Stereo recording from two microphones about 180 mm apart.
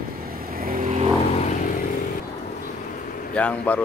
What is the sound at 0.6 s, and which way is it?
Vehicle, 50° right (ahead or behind).